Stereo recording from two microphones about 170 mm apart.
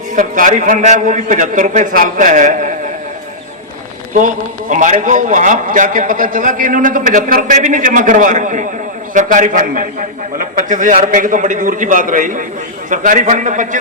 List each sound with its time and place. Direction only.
0.2 s a man's voice: 50° right (ahead or behind)
4.1 s a man's voice: 50° right (ahead or behind)